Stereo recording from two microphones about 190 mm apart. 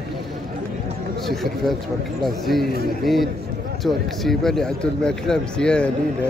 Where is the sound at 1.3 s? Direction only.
Centre (ahead or behind).